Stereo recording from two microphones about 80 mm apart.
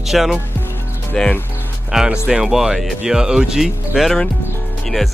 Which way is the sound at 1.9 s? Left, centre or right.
Centre.